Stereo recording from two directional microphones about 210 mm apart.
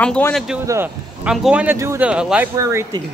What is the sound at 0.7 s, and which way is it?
Speech, 10° right (ahead or behind).